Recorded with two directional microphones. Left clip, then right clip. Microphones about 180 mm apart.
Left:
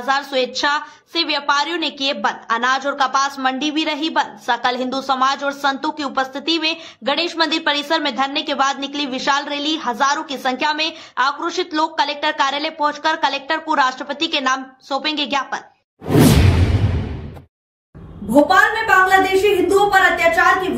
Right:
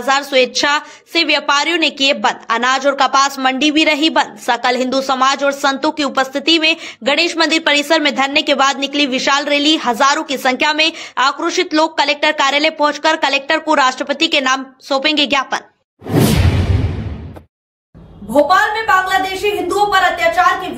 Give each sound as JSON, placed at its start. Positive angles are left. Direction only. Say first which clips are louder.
{"t": 0.0, "sound": "a woman's voice", "louder": "right 5 dB", "side_deg": -15}
{"t": 18.3, "sound": "a woman's voice", "louder": "right 1 dB", "side_deg": 0}